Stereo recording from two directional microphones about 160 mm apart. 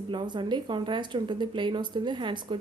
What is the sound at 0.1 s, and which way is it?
A woman's voice, 30° right (ahead or behind).